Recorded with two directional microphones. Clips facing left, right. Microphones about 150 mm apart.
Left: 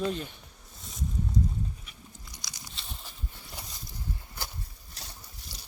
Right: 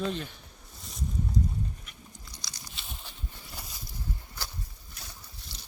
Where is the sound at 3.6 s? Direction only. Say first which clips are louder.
Left 1 dB; 20° left (ahead or behind).